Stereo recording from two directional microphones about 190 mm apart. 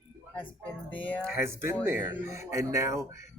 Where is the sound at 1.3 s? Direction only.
15° right (ahead or behind).